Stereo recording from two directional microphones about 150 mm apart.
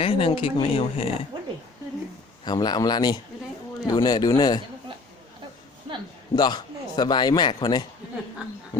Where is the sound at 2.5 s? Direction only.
25° left (ahead or behind).